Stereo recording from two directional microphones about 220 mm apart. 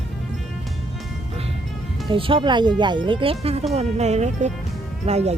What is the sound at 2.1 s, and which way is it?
Speech, 25° right (ahead or behind).